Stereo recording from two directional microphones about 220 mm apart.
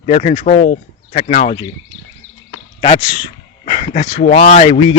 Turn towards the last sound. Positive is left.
turn(degrees=30)  # may be behind; listen again after turning